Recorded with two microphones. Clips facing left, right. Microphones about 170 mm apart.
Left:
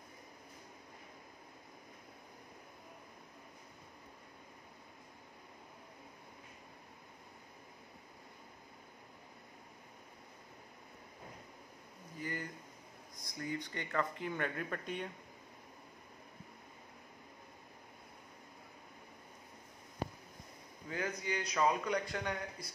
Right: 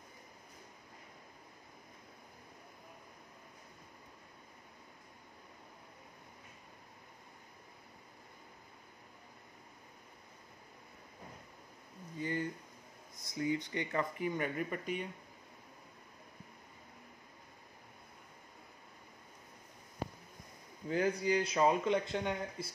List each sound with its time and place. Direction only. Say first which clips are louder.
12.2 s a sound: right 6 dB; 25° right (ahead or behind)
13.7 s speech: right 2 dB; 15° right (ahead or behind)
20.9 s speech: right 7 dB; 30° right (ahead or behind)